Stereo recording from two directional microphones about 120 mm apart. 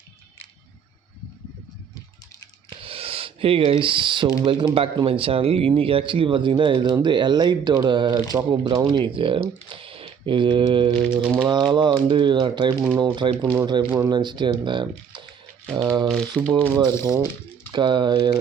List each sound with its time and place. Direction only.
2.6 s computer keyboard: 50° right (ahead or behind)
4.4 s speech: 45° right (ahead or behind)
11.0 s a sound: 10° right (ahead or behind)
11.3 s speech: 40° right (ahead or behind)
16.3 s speech: 40° right (ahead or behind)